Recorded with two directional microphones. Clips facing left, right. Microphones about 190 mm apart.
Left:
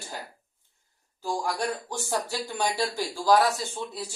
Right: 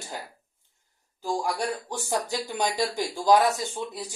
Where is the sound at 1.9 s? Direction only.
15° right (ahead or behind).